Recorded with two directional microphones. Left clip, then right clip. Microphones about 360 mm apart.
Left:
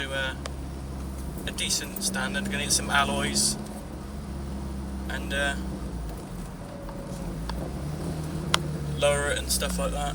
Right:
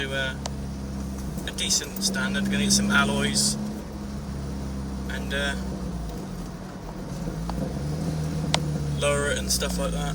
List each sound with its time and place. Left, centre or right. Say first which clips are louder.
0.0 s vehicle: right 2 dB; centre
1.5 s speech: right 3 dB; centre
8.5 s vehicle: left 1 dB; centre